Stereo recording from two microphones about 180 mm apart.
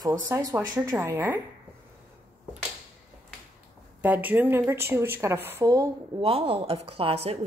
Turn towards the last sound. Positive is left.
turn(degrees=-35)  # may be behind; listen again after turning